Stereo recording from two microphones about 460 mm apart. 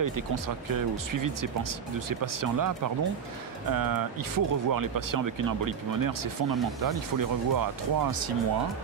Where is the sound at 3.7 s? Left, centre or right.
Right.